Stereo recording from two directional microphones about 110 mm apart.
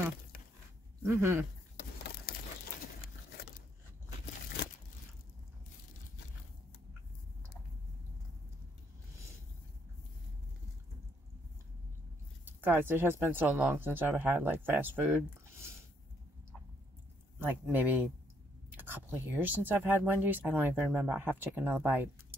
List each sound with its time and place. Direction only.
1.0 s speech: 20° right (ahead or behind)
12.4 s speech: 20° right (ahead or behind)
17.4 s speech: 20° right (ahead or behind)